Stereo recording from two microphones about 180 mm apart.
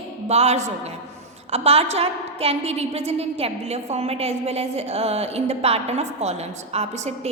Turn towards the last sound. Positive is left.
turn(degrees=-40)  # may be behind; listen again after turning